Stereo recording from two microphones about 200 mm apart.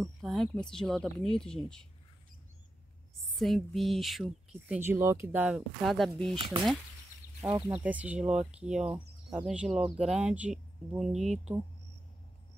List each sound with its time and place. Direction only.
0.0 s speech: centre (ahead or behind)
3.3 s speech: centre (ahead or behind)
6.3 s speech: 25° right (ahead or behind); by 11.4 s centre (ahead or behind)